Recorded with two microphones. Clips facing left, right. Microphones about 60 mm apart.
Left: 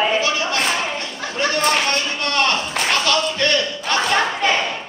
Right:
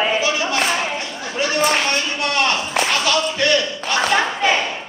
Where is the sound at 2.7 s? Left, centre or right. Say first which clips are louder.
Right 1 dB; centre.